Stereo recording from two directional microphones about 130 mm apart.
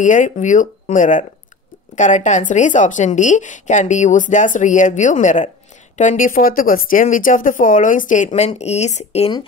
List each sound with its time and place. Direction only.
0.0 s speech: 75° left (ahead or behind)
2.0 s a woman's voice: 70° left (ahead or behind)